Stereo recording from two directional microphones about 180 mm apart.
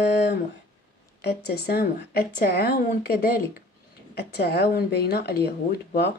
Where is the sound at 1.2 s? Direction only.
60° left (ahead or behind).